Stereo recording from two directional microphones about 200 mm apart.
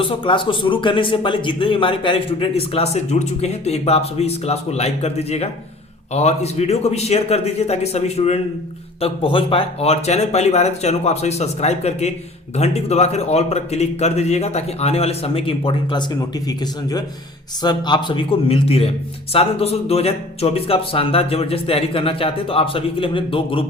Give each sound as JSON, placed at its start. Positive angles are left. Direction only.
{"t": 0.0, "sound": "a man's voice", "side_deg": 25}
{"t": 17.6, "sound": "speech", "side_deg": 20}